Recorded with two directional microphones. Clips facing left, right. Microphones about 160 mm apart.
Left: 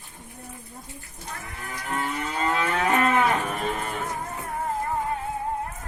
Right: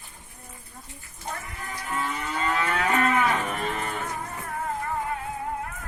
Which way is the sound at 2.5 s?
15° left (ahead or behind).